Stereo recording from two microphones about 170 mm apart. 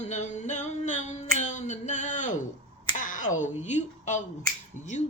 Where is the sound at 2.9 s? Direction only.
50° left (ahead or behind).